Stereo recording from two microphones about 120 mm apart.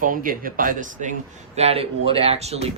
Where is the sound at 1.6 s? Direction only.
60° right (ahead or behind).